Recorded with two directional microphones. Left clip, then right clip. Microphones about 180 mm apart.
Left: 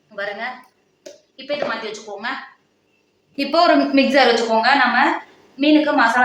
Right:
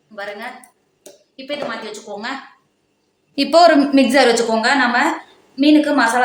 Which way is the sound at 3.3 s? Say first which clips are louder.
Right 4 dB; 80° right.